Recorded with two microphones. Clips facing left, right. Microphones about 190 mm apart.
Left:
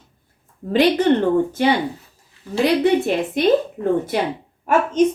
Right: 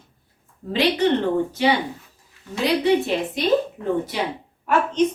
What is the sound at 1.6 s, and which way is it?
Speech, 50° left (ahead or behind).